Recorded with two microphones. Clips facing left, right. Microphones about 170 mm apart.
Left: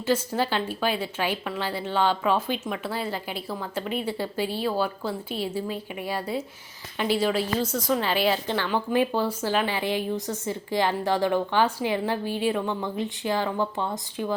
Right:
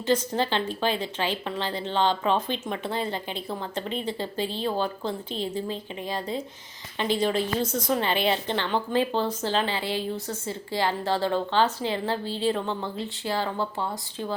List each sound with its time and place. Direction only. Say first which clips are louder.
0.0 s speech: even; 10° left (ahead or behind)
7.7 s a woman's voice: left 1 dB; 20° right (ahead or behind)
8.6 s speech: left 2 dB; 15° left (ahead or behind)